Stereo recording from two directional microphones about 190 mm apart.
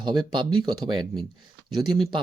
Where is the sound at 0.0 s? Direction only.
25° right (ahead or behind).